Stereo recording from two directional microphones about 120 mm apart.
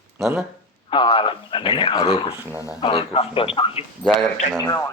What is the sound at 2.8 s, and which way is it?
A man's voice, 45° left (ahead or behind).